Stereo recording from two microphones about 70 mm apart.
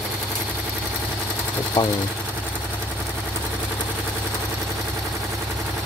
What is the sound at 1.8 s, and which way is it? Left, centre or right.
Speech, left.